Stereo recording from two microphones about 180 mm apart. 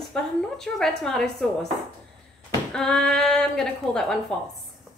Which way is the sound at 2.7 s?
5° left (ahead or behind).